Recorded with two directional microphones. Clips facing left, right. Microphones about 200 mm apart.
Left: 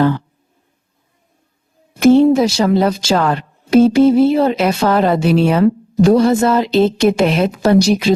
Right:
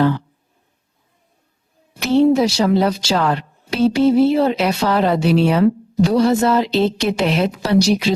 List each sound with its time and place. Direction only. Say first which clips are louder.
2.0 s speech: left 4 dB; 50° left (ahead or behind)